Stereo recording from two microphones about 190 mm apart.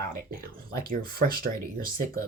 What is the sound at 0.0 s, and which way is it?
Speech, 50° right (ahead or behind).